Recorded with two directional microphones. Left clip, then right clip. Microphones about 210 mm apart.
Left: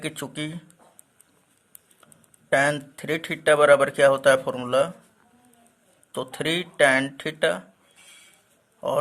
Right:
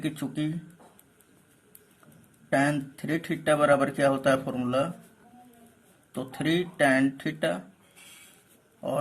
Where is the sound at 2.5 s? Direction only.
45° left (ahead or behind).